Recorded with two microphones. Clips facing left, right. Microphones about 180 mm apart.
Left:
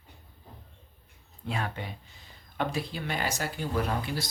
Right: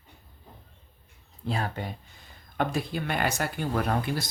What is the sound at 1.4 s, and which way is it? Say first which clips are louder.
Speech: right 3 dB; 35° right (ahead or behind).